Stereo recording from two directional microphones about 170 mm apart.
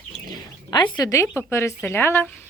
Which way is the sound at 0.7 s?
25° left (ahead or behind).